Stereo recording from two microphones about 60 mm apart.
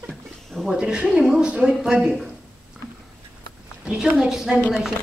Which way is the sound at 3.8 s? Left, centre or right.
Centre.